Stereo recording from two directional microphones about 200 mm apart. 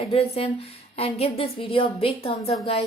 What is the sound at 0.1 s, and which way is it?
A woman's voice, 30° left (ahead or behind).